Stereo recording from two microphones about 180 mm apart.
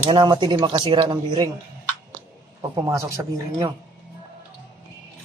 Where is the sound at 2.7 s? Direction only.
20° right (ahead or behind).